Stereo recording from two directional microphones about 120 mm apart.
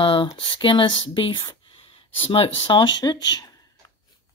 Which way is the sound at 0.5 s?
45° left (ahead or behind).